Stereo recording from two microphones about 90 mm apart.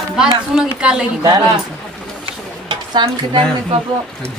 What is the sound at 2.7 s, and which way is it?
Speech, 55° right (ahead or behind).